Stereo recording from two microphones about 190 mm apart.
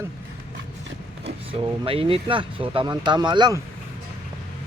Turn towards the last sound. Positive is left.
turn(degrees=-25)  # may be behind; listen again after turning